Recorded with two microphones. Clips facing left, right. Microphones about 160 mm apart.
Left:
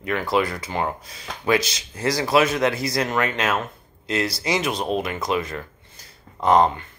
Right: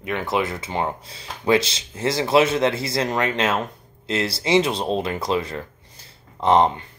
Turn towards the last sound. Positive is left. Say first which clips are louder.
# even
turn(degrees=-25)  # may be behind; listen again after turning